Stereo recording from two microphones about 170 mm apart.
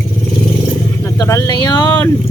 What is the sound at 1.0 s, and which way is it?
Speech, 15° left (ahead or behind).